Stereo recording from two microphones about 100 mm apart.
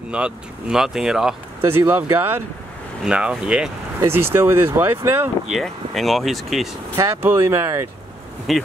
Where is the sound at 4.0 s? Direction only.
25° right (ahead or behind).